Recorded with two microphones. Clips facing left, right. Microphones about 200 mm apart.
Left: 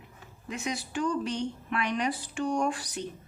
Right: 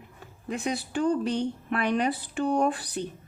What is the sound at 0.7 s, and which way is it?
Speech, 55° right (ahead or behind).